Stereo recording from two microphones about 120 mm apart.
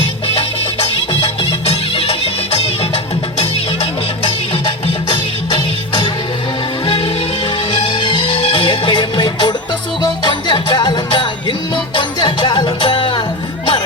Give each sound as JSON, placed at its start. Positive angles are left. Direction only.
{"t": 1.6, "sound": "music", "side_deg": 55}
{"t": 6.8, "sound": "music", "side_deg": 50}